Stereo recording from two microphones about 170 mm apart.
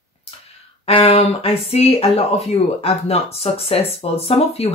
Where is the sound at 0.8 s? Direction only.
35° left (ahead or behind).